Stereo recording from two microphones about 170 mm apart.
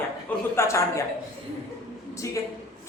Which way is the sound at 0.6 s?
15° left (ahead or behind).